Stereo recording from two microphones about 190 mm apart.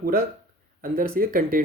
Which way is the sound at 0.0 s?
50° right (ahead or behind).